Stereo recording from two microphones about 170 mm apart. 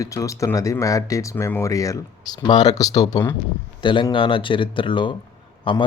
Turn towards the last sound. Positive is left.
turn(degrees=30)  # may be behind; listen again after turning